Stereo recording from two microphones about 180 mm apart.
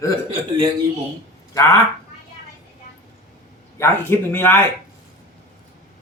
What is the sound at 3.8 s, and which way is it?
Speech, 10° left (ahead or behind).